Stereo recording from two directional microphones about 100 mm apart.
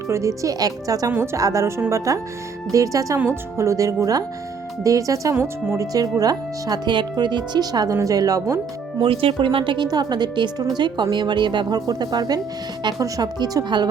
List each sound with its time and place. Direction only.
0.1 s speech: 30° right (ahead or behind)
1.1 s speech: 25° right (ahead or behind)
9.0 s a woman's voice: 60° right (ahead or behind); by 13.8 s 45° right (ahead or behind)